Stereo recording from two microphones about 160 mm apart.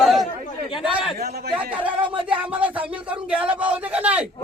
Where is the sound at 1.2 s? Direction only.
75° right (ahead or behind).